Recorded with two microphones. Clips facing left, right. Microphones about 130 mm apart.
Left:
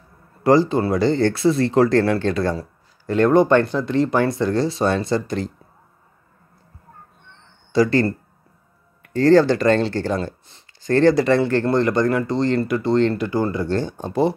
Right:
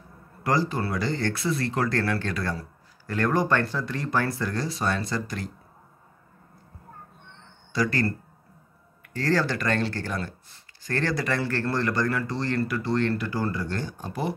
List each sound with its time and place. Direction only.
0.4 s speech: 25° left (ahead or behind)
7.7 s speech: 25° left (ahead or behind)
9.1 s speech: 25° left (ahead or behind)